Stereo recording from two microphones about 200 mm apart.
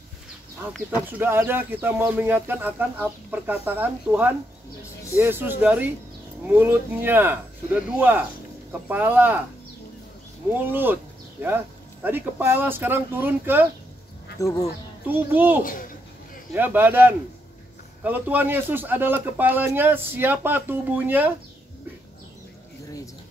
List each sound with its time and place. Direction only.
1.0 s speech: 10° right (ahead or behind)
10.5 s speech: 10° right (ahead or behind)
14.4 s speech: 15° left (ahead or behind)
15.0 s speech: 10° right (ahead or behind)